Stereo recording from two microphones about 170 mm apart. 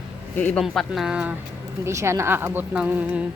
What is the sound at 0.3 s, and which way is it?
Speech, 10° left (ahead or behind).